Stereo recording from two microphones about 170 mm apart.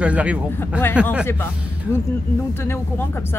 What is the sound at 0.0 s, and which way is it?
Speech, 5° right (ahead or behind).